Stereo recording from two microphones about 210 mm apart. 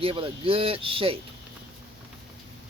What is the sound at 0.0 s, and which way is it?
Speech, 25° right (ahead or behind).